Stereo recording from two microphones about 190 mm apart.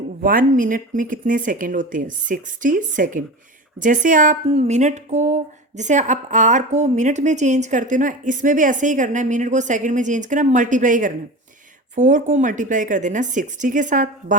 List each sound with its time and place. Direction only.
0.2 s a woman's voice: 45° right (ahead or behind)